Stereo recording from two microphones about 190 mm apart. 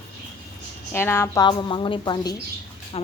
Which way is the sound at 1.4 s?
25° left (ahead or behind).